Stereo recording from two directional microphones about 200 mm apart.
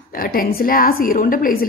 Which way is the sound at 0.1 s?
45° left (ahead or behind).